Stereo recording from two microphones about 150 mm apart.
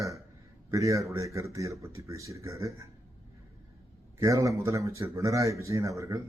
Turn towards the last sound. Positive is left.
turn(degrees=-20)  # may be behind; listen again after turning